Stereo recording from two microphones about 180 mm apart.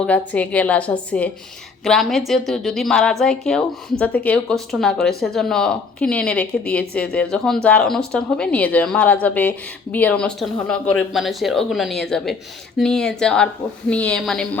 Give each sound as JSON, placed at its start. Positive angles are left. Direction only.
{"t": 0.0, "sound": "a woman's voice", "side_deg": 5}